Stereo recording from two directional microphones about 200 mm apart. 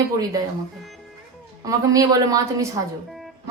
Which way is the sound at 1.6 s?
15° right (ahead or behind).